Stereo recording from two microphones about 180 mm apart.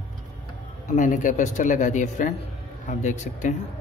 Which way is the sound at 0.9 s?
45° left (ahead or behind).